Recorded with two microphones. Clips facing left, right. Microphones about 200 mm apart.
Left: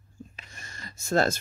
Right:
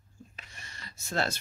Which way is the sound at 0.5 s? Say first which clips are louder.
Left 4 dB; 45° left (ahead or behind).